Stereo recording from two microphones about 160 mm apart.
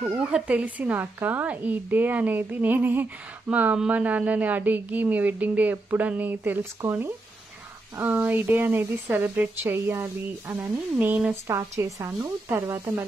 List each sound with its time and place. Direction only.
0.3 s a woman's voice: 10° right (ahead or behind)